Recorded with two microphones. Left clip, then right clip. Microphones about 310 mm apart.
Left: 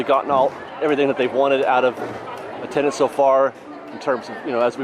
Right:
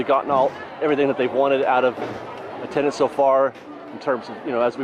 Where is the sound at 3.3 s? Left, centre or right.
Centre.